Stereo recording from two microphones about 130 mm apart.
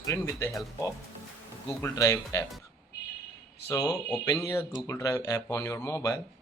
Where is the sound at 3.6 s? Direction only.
25° left (ahead or behind).